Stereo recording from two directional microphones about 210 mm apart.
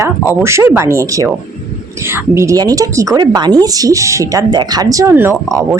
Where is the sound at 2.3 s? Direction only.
15° right (ahead or behind).